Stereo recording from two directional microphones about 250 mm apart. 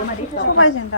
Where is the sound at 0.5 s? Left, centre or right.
Left.